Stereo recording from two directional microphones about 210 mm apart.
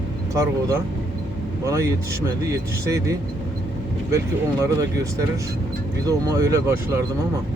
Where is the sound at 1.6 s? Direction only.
15° right (ahead or behind).